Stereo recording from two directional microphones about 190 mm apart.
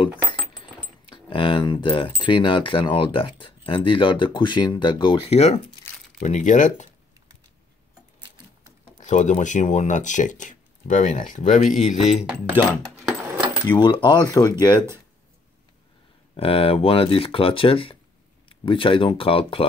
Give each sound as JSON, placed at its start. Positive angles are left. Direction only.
{"t": 1.1, "sound": "speech", "side_deg": 25}
{"t": 5.9, "sound": "crumpling", "side_deg": 15}
{"t": 6.2, "sound": "speech", "side_deg": 40}
{"t": 9.0, "sound": "speech", "side_deg": 40}
{"t": 12.2, "sound": "a sound", "side_deg": -5}
{"t": 13.7, "sound": "speech", "side_deg": 25}
{"t": 16.3, "sound": "speech", "side_deg": 30}